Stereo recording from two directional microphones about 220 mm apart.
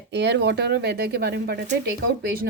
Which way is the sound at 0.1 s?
50° right (ahead or behind).